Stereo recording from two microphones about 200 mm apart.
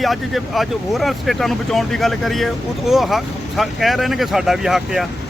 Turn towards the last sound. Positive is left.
turn(degrees=0)  # may be behind; listen again after turning